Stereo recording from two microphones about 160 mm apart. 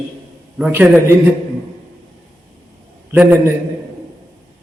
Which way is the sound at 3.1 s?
10° right (ahead or behind).